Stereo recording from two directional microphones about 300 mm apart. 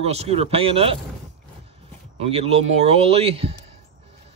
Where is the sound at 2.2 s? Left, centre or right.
Centre.